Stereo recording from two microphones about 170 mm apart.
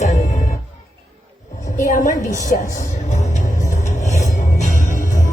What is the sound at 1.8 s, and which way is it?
Speech, 50° left (ahead or behind).